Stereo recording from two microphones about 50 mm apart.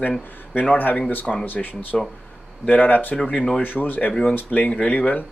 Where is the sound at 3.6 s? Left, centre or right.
Left.